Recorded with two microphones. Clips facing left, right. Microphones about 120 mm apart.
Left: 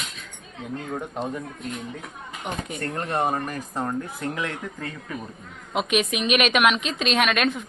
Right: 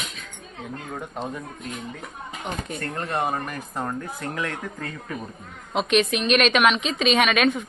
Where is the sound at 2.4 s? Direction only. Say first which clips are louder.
Left 1 dB; 15° left (ahead or behind).